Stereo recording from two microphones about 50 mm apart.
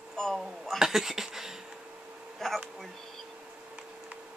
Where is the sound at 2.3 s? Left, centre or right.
Centre.